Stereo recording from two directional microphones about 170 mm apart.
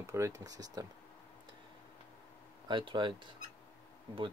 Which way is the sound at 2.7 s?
30° right (ahead or behind).